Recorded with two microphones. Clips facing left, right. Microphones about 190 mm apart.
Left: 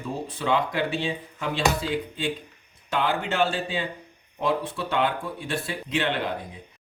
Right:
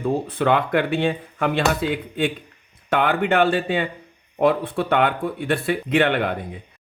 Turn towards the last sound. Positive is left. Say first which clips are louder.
# right 7 dB
turn(degrees=-60)  # may be behind; listen again after turning